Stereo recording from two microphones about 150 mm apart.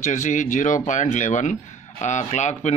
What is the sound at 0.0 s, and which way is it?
Speech, 55° left (ahead or behind).